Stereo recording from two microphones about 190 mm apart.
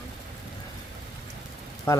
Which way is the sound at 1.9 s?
15° left (ahead or behind).